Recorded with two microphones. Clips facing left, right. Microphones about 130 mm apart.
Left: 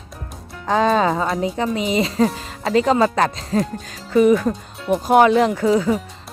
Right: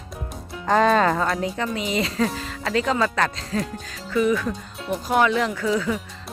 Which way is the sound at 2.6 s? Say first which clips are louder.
Left 6 dB; 25° left (ahead or behind).